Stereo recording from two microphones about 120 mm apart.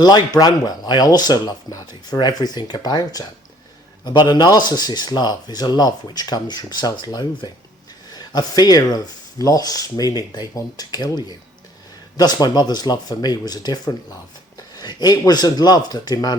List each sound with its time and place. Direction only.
0.0 s speech: 35° left (ahead or behind)